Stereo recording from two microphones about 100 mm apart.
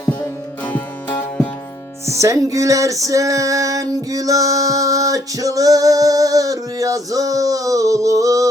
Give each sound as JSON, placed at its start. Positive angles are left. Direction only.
{"t": 0.6, "sound": "music", "side_deg": 15}
{"t": 2.0, "sound": "music", "side_deg": -30}